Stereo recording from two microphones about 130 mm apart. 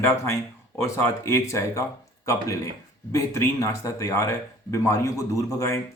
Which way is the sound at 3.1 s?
25° left (ahead or behind).